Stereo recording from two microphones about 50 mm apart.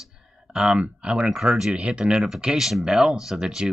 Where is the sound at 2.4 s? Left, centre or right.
Centre.